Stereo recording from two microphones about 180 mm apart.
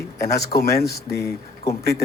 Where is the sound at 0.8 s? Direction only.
65° left (ahead or behind).